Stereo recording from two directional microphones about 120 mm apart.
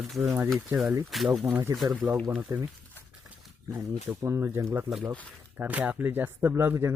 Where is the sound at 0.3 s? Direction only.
25° right (ahead or behind).